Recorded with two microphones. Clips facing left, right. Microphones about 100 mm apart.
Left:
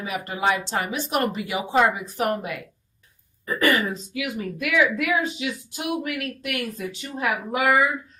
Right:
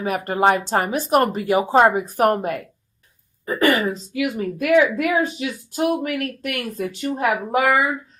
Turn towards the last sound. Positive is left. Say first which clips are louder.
# right 5 dB
turn(degrees=-45)  # may be behind; listen again after turning